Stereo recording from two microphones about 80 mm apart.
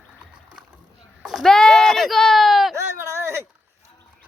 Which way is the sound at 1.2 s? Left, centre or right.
Centre.